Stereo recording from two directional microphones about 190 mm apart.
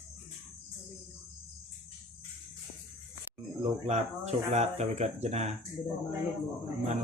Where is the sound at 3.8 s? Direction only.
35° right (ahead or behind).